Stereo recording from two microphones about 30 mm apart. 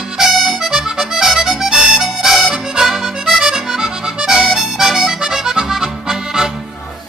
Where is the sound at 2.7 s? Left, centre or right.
Centre.